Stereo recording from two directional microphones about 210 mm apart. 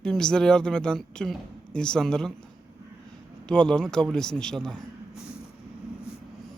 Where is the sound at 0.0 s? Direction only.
5° left (ahead or behind).